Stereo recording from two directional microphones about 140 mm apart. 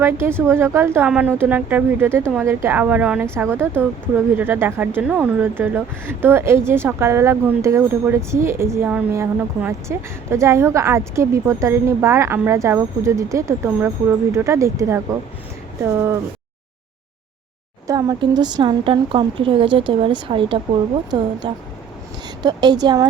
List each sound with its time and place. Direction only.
0.0 s a woman's voice: 15° right (ahead or behind)
17.8 s a woman's voice: 30° right (ahead or behind)